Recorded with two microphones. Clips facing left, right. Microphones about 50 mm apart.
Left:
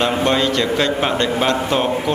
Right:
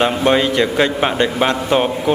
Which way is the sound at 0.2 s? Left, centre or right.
Centre.